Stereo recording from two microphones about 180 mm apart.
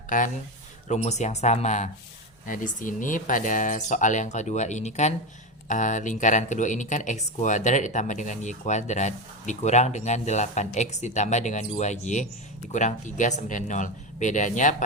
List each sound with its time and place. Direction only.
0.1 s speech: 45° left (ahead or behind)